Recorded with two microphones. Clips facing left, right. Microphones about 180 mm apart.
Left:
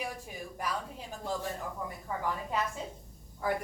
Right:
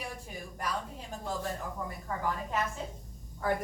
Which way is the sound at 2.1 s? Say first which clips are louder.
Even; 10° left (ahead or behind).